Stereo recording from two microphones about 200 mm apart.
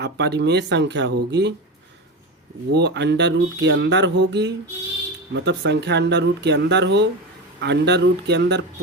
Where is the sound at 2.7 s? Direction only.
60° right (ahead or behind).